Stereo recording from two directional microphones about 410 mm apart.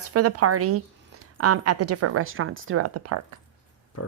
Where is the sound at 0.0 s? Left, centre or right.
Right.